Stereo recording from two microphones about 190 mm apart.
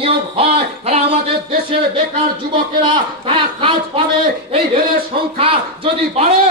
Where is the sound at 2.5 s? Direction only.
25° right (ahead or behind).